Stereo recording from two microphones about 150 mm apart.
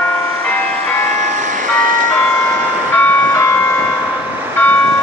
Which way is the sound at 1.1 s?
55° right (ahead or behind).